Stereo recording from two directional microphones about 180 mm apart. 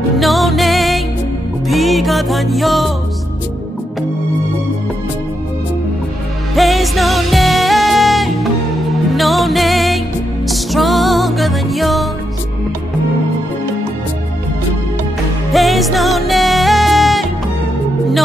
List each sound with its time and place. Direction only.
0.2 s music: centre (ahead or behind)
6.5 s music: centre (ahead or behind)
15.5 s music: centre (ahead or behind)